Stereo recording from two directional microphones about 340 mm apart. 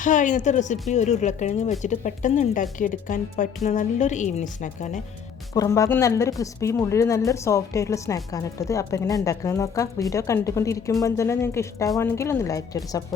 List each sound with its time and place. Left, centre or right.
0.0 s speech: left
5.5 s a woman's voice: centre